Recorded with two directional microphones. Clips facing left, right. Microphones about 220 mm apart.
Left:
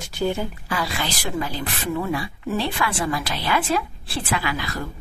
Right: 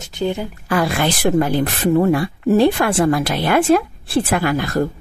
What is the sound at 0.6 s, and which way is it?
Speech, 55° right (ahead or behind).